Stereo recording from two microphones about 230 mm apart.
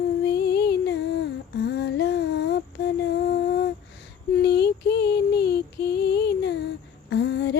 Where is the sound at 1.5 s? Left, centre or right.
Left.